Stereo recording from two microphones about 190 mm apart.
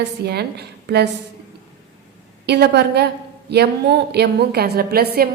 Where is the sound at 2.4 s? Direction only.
60° right (ahead or behind).